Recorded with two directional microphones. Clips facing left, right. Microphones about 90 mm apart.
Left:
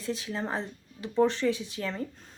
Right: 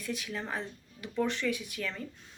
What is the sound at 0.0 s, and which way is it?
A woman's voice, 30° left (ahead or behind).